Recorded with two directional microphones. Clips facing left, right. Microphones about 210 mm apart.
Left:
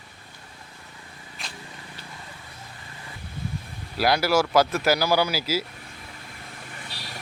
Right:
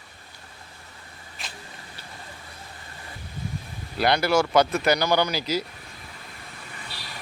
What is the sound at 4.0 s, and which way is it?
Speech, 5° left (ahead or behind).